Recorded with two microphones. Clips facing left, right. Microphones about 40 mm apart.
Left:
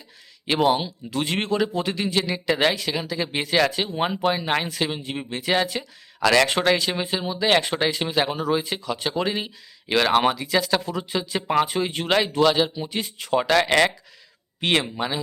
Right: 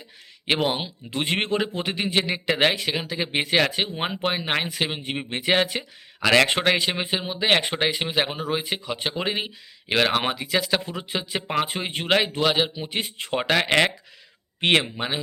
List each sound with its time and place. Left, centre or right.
0.4 s a man's voice: right
4.9 s a man's voice: right
13.5 s a man's voice: right